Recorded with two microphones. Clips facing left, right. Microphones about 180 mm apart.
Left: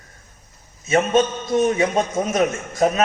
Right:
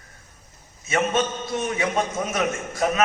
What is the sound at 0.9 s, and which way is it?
A man's voice, 35° left (ahead or behind).